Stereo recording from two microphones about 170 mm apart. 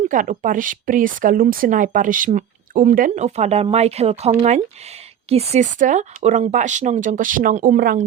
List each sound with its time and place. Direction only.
0.0 s speech: 50° right (ahead or behind)